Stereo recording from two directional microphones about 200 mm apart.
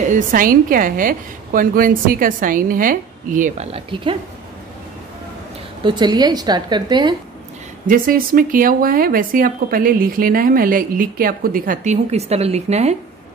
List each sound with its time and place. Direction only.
0.1 s speech: 45° right (ahead or behind); by 4.2 s 25° right (ahead or behind)
5.9 s a woman's voice: 20° right (ahead or behind)
7.8 s speech: 45° right (ahead or behind)